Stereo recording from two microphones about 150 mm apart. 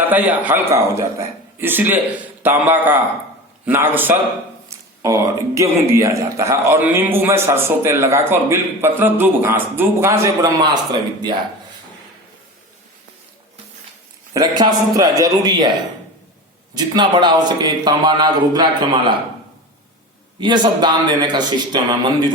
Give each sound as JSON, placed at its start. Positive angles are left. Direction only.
{"t": 0.0, "sound": "speech", "side_deg": -10}
{"t": 14.3, "sound": "a man's voice", "side_deg": -25}
{"t": 16.7, "sound": "a man's voice", "side_deg": -30}
{"t": 20.4, "sound": "a man's voice", "side_deg": -30}